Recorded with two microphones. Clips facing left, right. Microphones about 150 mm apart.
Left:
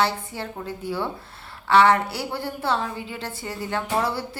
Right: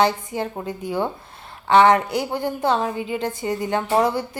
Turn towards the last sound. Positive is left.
turn(degrees=-15)  # may be behind; listen again after turning